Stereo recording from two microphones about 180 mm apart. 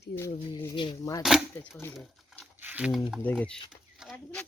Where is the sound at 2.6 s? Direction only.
10° right (ahead or behind).